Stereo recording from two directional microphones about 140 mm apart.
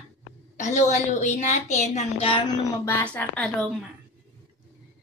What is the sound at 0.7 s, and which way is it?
A woman's voice, 55° left (ahead or behind).